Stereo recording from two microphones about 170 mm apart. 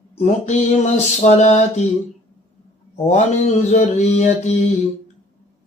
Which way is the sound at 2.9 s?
40° left (ahead or behind).